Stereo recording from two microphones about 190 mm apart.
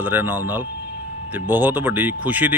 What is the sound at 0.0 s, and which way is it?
Speech, 10° right (ahead or behind).